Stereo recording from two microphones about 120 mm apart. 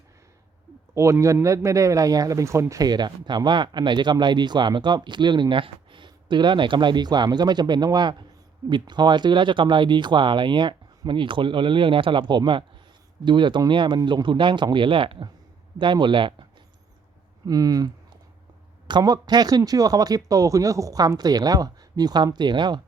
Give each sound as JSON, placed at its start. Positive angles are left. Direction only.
{"t": 0.9, "sound": "speech", "side_deg": -25}
{"t": 17.4, "sound": "speech", "side_deg": -30}